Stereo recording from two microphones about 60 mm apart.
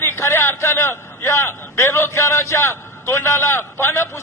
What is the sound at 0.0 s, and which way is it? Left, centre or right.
A man's voice, left.